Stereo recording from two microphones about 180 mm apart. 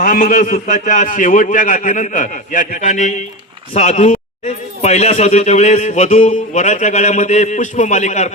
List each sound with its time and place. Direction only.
0.0 s a man's voice: 50° left (ahead or behind)